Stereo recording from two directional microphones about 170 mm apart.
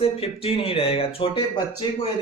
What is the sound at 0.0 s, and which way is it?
Speech, 35° left (ahead or behind).